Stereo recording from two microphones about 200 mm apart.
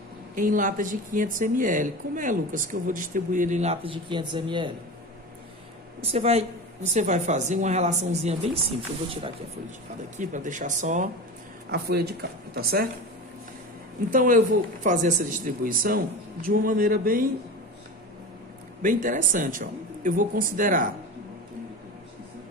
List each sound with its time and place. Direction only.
0.4 s a woman's voice: 40° right (ahead or behind); by 4.7 s 25° right (ahead or behind)
5.9 s a woman's voice: 30° right (ahead or behind)
10.1 s a woman's voice: 40° right (ahead or behind)
11.7 s a man's voice: 55° right (ahead or behind)
14.1 s a man's voice: 40° right (ahead or behind)
18.8 s a woman's voice: 40° right (ahead or behind)